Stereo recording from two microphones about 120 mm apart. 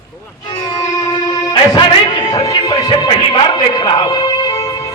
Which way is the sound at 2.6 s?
30° left (ahead or behind).